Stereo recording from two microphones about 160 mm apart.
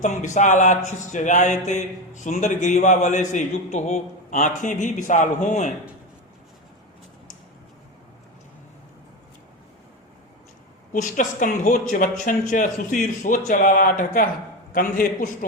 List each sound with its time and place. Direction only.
0.0 s speech: 50° left (ahead or behind)
10.9 s speech: 55° left (ahead or behind)